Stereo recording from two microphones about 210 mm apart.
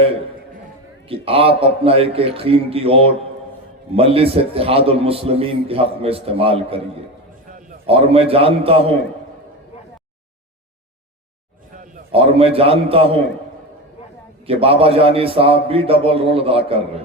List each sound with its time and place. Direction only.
1.0 s a man's voice: 25° right (ahead or behind)
7.9 s a man's voice: 25° right (ahead or behind)
12.1 s a man's voice: 25° right (ahead or behind)
14.4 s a man's voice: 25° right (ahead or behind)